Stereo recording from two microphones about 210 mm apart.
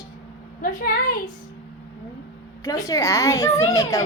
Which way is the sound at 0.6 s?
40° left (ahead or behind).